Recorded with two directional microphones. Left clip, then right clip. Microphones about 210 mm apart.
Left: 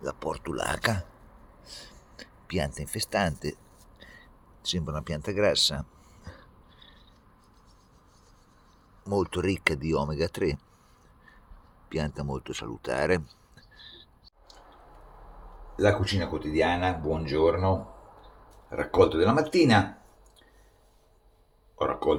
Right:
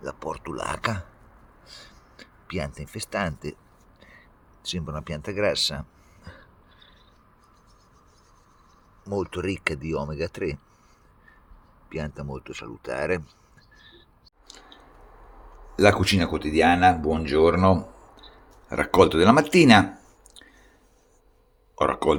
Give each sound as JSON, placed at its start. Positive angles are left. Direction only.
{"t": 0.0, "sound": "speech", "side_deg": 5}
{"t": 6.2, "sound": "a sound", "side_deg": 0}
{"t": 9.0, "sound": "speech", "side_deg": 10}
{"t": 11.9, "sound": "speech", "side_deg": 15}
{"t": 13.7, "sound": "a sound", "side_deg": 5}
{"t": 15.7, "sound": "speech", "side_deg": -50}
{"t": 18.7, "sound": "speech", "side_deg": -35}
{"t": 21.8, "sound": "speech", "side_deg": -35}